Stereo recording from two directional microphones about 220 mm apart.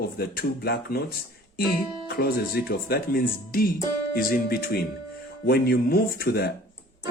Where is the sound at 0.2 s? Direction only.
45° left (ahead or behind).